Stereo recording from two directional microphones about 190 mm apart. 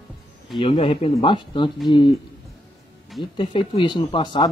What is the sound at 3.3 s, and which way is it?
Speech, 25° left (ahead or behind).